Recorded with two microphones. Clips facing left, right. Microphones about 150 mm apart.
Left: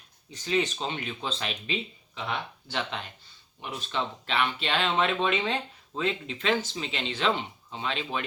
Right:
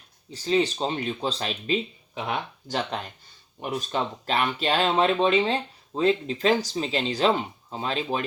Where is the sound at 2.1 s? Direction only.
50° right (ahead or behind).